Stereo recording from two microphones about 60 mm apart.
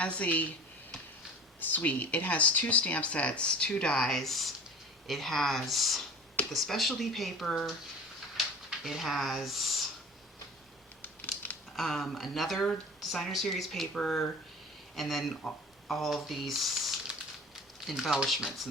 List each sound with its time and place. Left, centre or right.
0.0 s speech: left
1.6 s speech: left; by 7.8 s centre
8.8 s speech: centre
11.0 s scissors: left
11.8 s speech: centre
15.9 s crumpling: centre
18.4 s speech: centre